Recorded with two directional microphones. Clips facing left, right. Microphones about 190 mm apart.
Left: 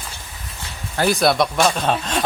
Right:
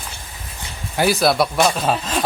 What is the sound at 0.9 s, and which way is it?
Speech, 5° right (ahead or behind).